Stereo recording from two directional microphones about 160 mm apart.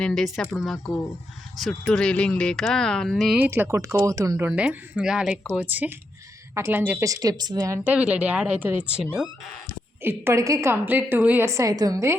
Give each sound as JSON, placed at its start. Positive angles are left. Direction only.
{"t": 0.0, "sound": "speech", "side_deg": 5}
{"t": 3.3, "sound": "a woman's voice", "side_deg": -15}
{"t": 7.9, "sound": "a woman's voice", "side_deg": -10}